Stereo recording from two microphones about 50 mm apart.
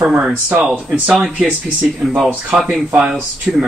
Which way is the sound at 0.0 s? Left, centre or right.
Centre.